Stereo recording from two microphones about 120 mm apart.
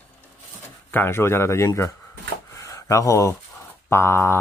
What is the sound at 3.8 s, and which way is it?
Speech, 20° left (ahead or behind).